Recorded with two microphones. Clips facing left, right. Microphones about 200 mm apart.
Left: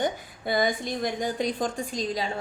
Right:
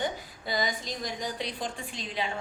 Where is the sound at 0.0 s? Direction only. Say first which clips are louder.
Left 5 dB; 55° left (ahead or behind).